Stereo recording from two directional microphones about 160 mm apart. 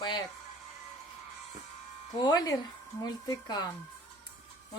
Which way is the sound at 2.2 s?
25° left (ahead or behind).